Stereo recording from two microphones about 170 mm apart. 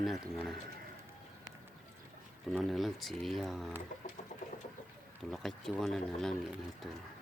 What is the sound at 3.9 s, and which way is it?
Chicken, 50° left (ahead or behind).